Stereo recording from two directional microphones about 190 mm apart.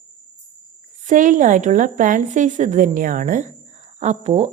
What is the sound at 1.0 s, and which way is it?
A woman's voice, 40° right (ahead or behind).